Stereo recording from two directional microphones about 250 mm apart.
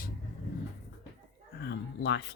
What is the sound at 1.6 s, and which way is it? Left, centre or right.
Speech, left.